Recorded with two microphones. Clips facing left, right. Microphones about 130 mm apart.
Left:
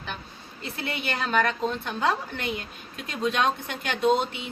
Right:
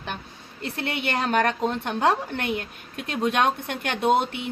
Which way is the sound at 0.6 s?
60° right (ahead or behind).